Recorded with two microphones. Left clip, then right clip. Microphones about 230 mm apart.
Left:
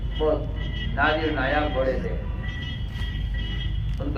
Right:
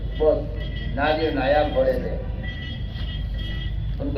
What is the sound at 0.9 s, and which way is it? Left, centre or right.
Speech, left.